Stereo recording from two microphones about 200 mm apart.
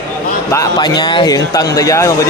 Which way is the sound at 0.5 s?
20° left (ahead or behind).